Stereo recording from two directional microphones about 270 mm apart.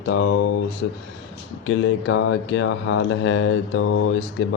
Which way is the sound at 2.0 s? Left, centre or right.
Left.